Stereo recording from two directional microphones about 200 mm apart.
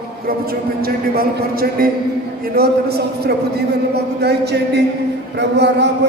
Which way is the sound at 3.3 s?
55° right (ahead or behind).